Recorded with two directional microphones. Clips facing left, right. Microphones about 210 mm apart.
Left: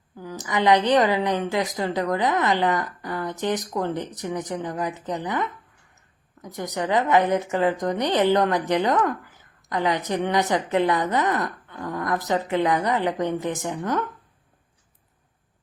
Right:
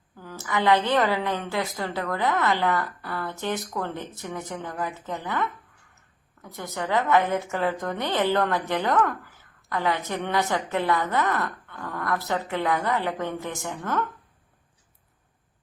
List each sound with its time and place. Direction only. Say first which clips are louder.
0.2 s a woman's voice: left 2 dB; 15° left (ahead or behind)